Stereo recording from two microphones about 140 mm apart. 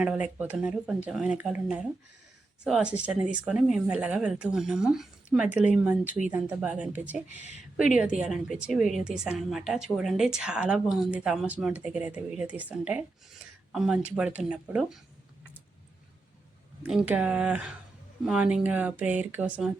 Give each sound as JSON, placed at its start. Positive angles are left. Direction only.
{"t": 0.0, "sound": "a woman's voice", "side_deg": -10}
{"t": 7.3, "sound": "speech", "side_deg": 55}
{"t": 7.8, "sound": "a woman's voice", "side_deg": -5}
{"t": 16.8, "sound": "speech", "side_deg": -5}